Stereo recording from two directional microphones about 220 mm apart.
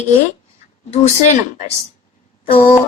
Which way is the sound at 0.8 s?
30° left (ahead or behind).